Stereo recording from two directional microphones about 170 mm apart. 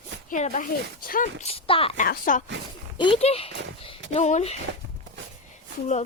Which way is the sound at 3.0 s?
35° left (ahead or behind).